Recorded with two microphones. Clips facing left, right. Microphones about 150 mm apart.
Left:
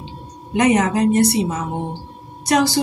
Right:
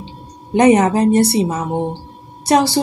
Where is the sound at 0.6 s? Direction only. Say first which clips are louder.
Right 4 dB; 35° right (ahead or behind).